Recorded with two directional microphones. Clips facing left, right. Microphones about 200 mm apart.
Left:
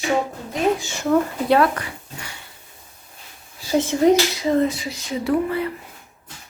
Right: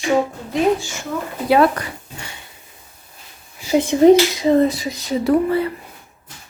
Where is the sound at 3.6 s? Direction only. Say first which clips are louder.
Right 4 dB; 15° right (ahead or behind).